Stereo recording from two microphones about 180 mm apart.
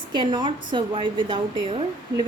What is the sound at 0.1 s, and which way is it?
A woman's voice, 25° right (ahead or behind).